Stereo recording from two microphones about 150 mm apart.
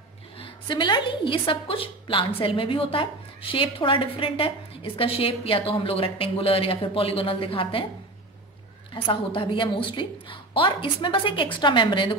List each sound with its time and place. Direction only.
0.4 s a woman's voice: 30° left (ahead or behind)
8.9 s a woman's voice: 35° left (ahead or behind)